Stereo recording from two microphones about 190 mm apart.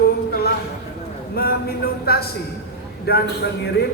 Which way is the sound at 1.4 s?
55° left (ahead or behind).